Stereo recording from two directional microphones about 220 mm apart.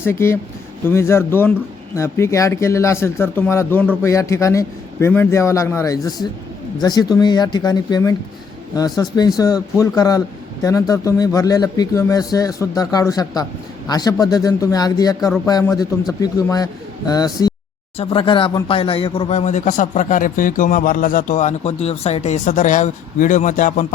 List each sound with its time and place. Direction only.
0.0 s speech: 10° left (ahead or behind); by 23.8 s 35° left (ahead or behind)